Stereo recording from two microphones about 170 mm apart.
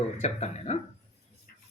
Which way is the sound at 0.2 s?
40° left (ahead or behind).